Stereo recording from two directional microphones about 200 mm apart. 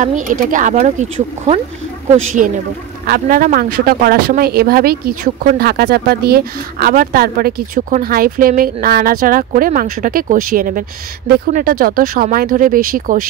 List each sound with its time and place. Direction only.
0.0 s speech: 40° right (ahead or behind)
3.1 s speech: 45° right (ahead or behind)